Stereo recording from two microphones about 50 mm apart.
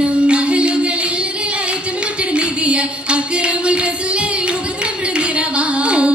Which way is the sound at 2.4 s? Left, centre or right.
Right.